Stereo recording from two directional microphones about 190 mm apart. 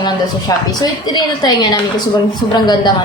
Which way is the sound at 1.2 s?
20° left (ahead or behind).